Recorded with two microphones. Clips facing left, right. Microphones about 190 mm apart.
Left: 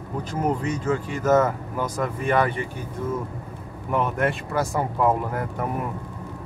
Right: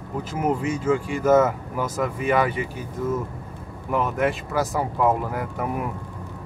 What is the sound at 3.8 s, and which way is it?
Speech, centre (ahead or behind).